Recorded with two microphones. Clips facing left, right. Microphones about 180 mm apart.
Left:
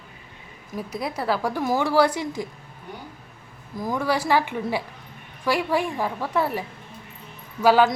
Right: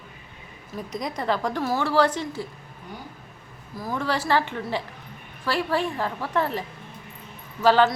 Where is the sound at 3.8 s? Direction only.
15° left (ahead or behind).